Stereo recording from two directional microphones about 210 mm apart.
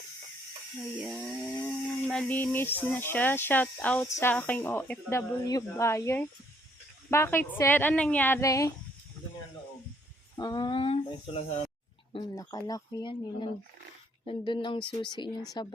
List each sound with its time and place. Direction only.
1.0 s chainsaw: 5° right (ahead or behind); by 8.7 s 15° left (ahead or behind)
10.3 s speech: 20° left (ahead or behind)
12.1 s chainsaw: 15° left (ahead or behind)
14.3 s speech: 20° left (ahead or behind)